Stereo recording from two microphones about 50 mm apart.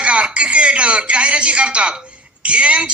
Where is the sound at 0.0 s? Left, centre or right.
Right.